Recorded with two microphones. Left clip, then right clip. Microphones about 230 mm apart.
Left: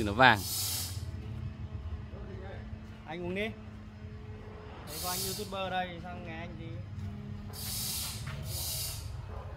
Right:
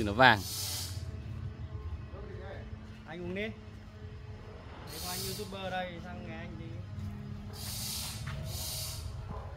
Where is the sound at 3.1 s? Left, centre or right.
Left.